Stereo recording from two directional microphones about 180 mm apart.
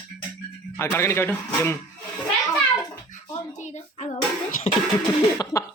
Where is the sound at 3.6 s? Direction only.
40° left (ahead or behind).